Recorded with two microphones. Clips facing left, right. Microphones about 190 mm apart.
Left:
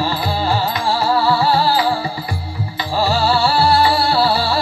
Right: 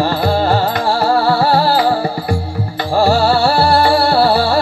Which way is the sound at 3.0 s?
55° right (ahead or behind).